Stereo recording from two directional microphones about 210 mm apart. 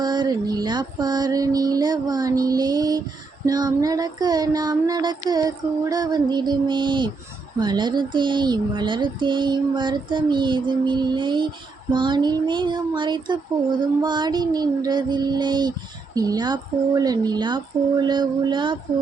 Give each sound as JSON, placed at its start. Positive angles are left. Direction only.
{"t": 0.0, "sound": "speech", "side_deg": -20}